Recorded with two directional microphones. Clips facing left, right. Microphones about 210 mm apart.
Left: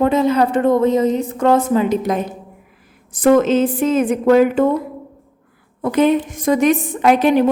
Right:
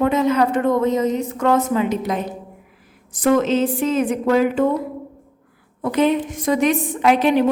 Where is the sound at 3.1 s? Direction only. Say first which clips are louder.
Left 4 dB; 50° left (ahead or behind).